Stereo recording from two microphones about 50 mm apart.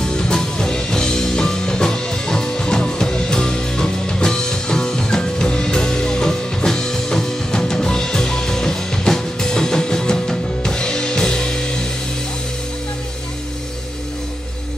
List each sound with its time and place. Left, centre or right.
0.0 s music: centre